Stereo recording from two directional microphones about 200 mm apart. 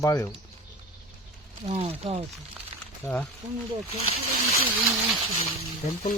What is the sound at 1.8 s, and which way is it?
Speech, 30° right (ahead or behind).